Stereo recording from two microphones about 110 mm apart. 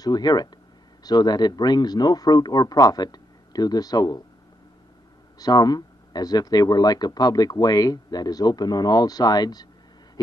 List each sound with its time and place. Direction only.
0.0 s speech: 40° left (ahead or behind)
5.4 s speech: 35° left (ahead or behind)